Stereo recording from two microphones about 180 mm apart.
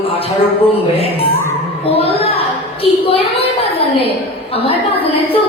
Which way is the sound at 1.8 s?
30° left (ahead or behind).